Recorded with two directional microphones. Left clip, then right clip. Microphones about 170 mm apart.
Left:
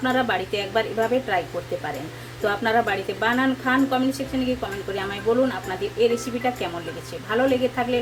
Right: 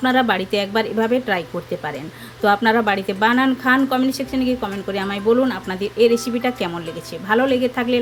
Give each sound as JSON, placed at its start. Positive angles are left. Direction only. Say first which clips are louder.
{"t": 0.0, "sound": "speech", "louder": "right 5 dB", "side_deg": -60}
{"t": 2.4, "sound": "speech", "louder": "right 5 dB", "side_deg": -60}